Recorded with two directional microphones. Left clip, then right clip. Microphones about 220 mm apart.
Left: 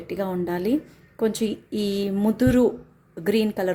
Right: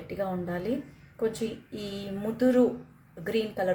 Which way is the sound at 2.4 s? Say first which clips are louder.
Left 2 dB; 50° left (ahead or behind).